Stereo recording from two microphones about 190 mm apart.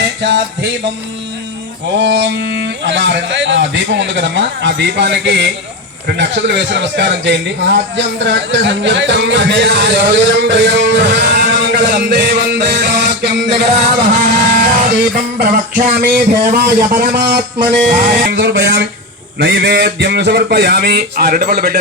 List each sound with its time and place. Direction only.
0.0 s music: 65° right (ahead or behind)
2.0 s a man's voice: 70° right (ahead or behind)
14.5 s a sound: 50° right (ahead or behind)
18.3 s speech: 60° right (ahead or behind)